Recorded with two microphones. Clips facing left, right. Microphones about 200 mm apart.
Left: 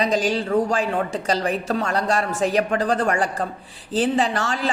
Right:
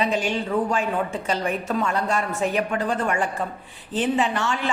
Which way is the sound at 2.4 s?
40° left (ahead or behind).